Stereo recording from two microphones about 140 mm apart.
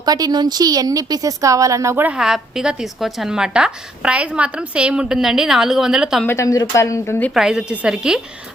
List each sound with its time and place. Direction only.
0.0 s a woman's voice: 30° right (ahead or behind); by 6.2 s 5° right (ahead or behind)
6.2 s speech: 20° left (ahead or behind)
7.3 s a woman's voice: 5° right (ahead or behind)